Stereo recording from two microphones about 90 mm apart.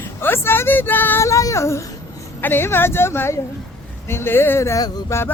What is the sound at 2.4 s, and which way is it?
Child singing, 25° left (ahead or behind).